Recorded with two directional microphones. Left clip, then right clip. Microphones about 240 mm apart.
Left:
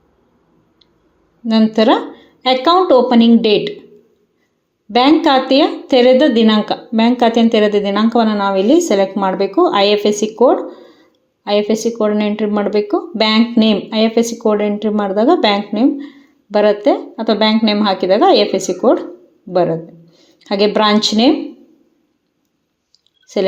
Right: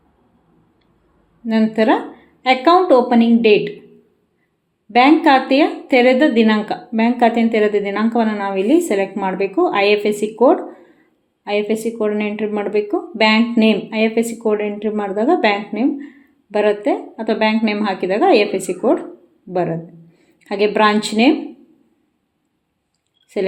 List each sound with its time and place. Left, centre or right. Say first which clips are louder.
1.5 s speech: left 3 dB; centre
4.9 s a woman's voice: even; centre
23.2 s clicking: left 4 dB; centre